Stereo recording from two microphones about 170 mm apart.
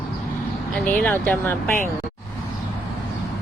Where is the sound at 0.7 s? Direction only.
10° left (ahead or behind).